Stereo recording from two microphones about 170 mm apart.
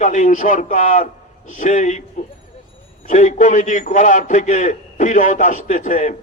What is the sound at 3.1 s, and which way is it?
A man's voice, 45° left (ahead or behind).